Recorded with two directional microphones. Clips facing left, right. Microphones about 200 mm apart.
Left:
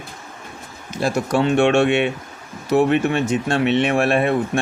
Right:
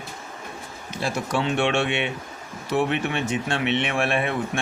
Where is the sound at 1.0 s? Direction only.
45° left (ahead or behind).